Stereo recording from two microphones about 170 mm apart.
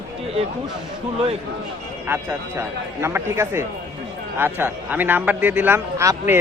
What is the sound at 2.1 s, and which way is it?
A man's voice, 15° right (ahead or behind).